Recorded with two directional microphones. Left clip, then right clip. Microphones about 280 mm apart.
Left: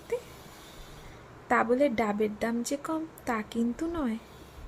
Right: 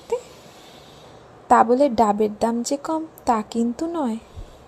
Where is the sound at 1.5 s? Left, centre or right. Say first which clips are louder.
Right 10 dB; centre.